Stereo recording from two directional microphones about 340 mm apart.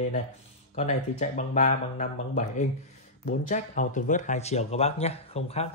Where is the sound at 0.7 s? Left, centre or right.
Left.